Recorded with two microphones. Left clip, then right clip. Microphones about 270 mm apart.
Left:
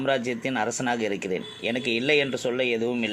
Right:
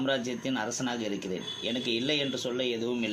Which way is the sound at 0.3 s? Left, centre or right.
Left.